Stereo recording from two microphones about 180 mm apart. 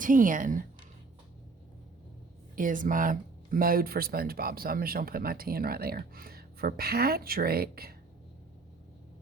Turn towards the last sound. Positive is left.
turn(degrees=-55)  # may be behind; listen again after turning